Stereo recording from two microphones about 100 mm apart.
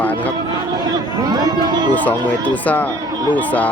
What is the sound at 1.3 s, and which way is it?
Speech, 40° right (ahead or behind).